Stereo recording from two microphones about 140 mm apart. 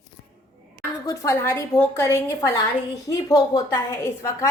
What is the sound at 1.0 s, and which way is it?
A woman's voice, 25° left (ahead or behind).